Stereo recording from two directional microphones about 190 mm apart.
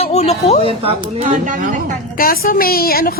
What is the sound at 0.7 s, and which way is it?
Speech, 30° right (ahead or behind).